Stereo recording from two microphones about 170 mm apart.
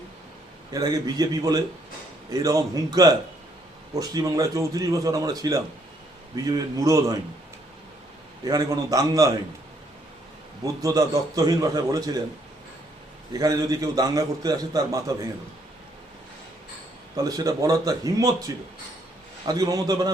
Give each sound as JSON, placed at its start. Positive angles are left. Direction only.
{"t": 0.7, "sound": "a man's voice", "side_deg": -20}
{"t": 8.4, "sound": "a man's voice", "side_deg": -20}
{"t": 10.8, "sound": "a man's voice", "side_deg": -20}
{"t": 13.3, "sound": "a man's voice", "side_deg": -20}
{"t": 17.2, "sound": "a man's voice", "side_deg": -20}